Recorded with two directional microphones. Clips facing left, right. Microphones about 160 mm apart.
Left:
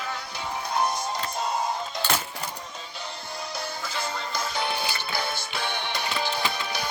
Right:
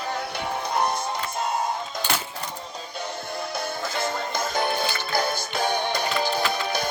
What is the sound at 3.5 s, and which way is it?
Music, 50° right (ahead or behind).